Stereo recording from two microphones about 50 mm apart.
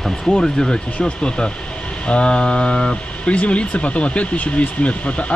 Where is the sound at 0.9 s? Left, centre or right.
Left.